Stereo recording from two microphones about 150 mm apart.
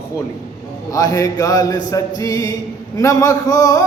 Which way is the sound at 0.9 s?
25° left (ahead or behind).